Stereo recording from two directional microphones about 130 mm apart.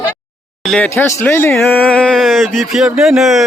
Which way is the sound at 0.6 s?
5° left (ahead or behind).